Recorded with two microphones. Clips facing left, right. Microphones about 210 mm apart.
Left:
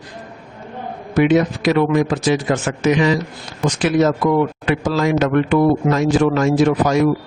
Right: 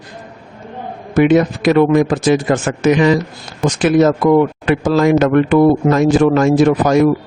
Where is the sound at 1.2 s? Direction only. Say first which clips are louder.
Right 3 dB; 50° right (ahead or behind).